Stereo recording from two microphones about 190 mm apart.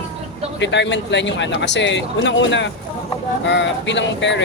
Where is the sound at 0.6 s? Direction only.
70° left (ahead or behind).